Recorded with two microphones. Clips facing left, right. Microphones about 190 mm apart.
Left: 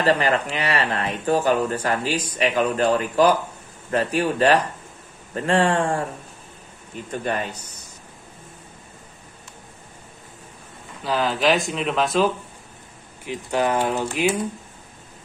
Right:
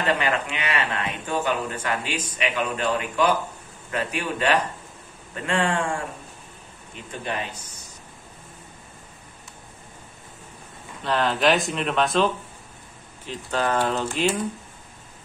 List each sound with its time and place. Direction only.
0.0 s speech: 35° left (ahead or behind)
7.1 s speech: 45° left (ahead or behind)
11.1 s speech: centre (ahead or behind)
13.2 s speech: 15° left (ahead or behind)